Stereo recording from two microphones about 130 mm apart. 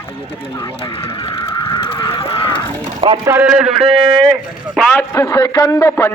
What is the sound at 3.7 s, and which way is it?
Speech, 45° right (ahead or behind).